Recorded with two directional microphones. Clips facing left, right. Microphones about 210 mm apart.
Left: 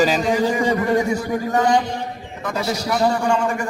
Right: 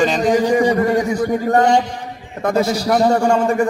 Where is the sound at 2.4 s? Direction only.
50° right (ahead or behind).